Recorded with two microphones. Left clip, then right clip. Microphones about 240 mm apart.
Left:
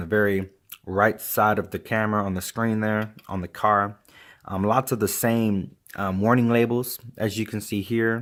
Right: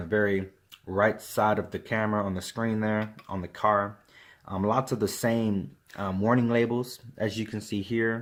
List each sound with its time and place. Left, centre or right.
0.0 s speech: left